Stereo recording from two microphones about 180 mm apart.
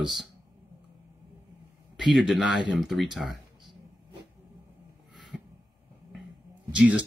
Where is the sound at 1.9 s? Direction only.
Centre (ahead or behind).